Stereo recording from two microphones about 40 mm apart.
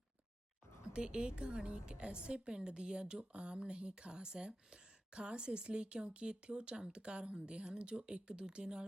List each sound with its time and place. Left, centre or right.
0.9 s a woman's voice: right